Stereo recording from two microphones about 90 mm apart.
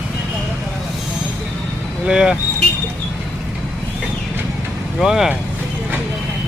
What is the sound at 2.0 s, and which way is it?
Vehicle, 10° right (ahead or behind).